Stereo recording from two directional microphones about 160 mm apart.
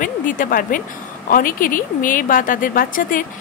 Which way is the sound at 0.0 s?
55° left (ahead or behind).